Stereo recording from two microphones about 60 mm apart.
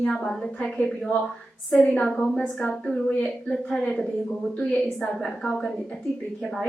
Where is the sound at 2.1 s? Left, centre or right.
Centre.